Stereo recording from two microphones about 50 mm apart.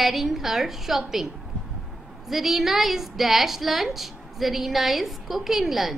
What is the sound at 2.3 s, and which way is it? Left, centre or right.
A woman's voice, centre.